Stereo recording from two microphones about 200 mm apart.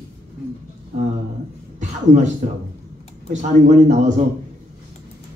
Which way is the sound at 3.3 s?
35° right (ahead or behind).